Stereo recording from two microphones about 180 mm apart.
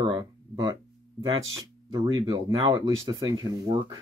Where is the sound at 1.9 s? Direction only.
25° right (ahead or behind).